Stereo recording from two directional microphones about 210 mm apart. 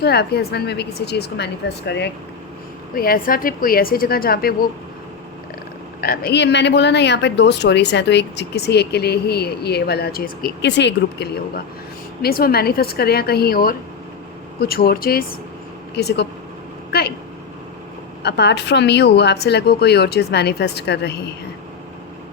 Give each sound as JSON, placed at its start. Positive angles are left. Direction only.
{"t": 0.0, "sound": "speech", "side_deg": 50}
{"t": 6.0, "sound": "speech", "side_deg": 50}
{"t": 16.9, "sound": "vehicle", "side_deg": 45}
{"t": 18.2, "sound": "speech", "side_deg": 50}